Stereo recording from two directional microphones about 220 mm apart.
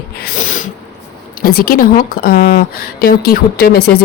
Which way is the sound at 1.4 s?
40° left (ahead or behind).